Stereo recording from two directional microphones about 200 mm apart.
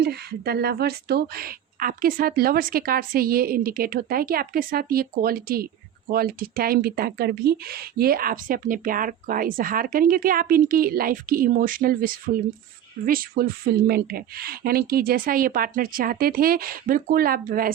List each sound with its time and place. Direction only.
0.0 s speech: 50° right (ahead or behind)